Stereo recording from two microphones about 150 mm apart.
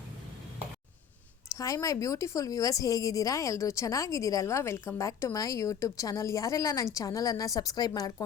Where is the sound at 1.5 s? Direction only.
20° left (ahead or behind).